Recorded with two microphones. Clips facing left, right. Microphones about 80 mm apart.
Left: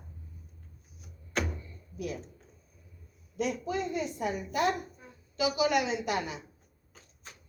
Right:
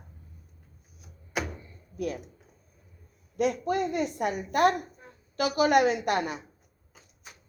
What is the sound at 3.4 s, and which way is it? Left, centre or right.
A woman's voice, right.